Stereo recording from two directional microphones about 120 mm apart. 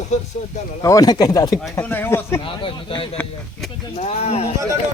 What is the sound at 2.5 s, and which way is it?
Speech, 45° left (ahead or behind).